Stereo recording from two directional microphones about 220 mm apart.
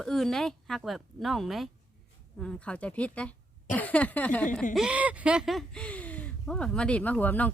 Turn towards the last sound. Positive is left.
turn(degrees=5)  # may be behind; listen again after turning